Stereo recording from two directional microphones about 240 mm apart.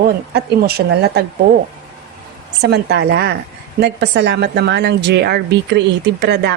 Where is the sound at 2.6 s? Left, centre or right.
Right.